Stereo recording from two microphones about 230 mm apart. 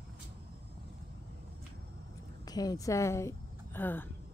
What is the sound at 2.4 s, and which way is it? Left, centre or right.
A woman's voice, centre.